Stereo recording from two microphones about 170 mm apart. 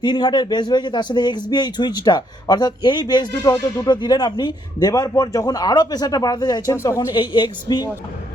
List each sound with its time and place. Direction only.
0.0 s a man's voice: 25° left (ahead or behind)